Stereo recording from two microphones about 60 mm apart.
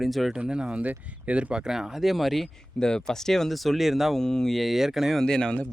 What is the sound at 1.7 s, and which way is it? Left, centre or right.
Speech, centre.